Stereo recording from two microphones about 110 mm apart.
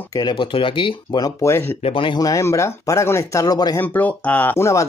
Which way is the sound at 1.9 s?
55° left (ahead or behind).